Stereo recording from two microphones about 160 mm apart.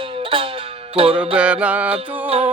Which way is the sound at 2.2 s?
40° right (ahead or behind).